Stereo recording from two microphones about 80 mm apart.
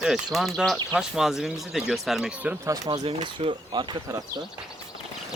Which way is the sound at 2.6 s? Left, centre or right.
Right.